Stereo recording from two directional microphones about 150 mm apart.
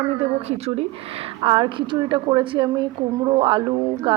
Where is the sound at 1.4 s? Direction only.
30° right (ahead or behind).